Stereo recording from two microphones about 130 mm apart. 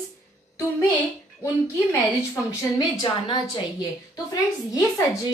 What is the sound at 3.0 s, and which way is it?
A woman's voice, 35° left (ahead or behind).